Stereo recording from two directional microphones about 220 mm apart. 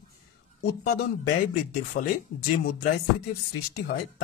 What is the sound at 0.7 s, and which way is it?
Speech, 45° left (ahead or behind).